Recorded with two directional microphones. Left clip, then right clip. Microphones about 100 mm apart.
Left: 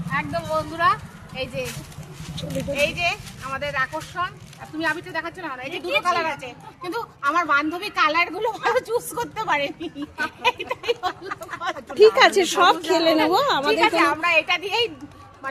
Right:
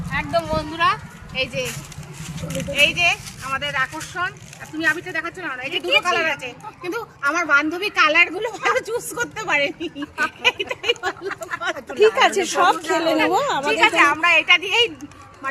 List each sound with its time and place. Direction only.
0.1 s speech: 35° right (ahead or behind)
0.5 s speech: 50° right (ahead or behind)
2.6 s a child's voice: 5° right (ahead or behind)
3.4 s speech: 5° left (ahead or behind)
4.8 s speech: 20° left (ahead or behind)
5.8 s speech: centre (ahead or behind); by 9.9 s 15° left (ahead or behind)
10.0 s speech: 30° right (ahead or behind)
10.4 s speech: 20° left (ahead or behind)
11.9 s speech: 35° left (ahead or behind)
13.1 s speech: 25° left (ahead or behind)
13.8 s a child's voice: centre (ahead or behind)